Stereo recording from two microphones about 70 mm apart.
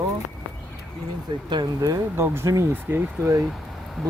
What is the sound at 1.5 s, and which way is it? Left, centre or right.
Speech, right.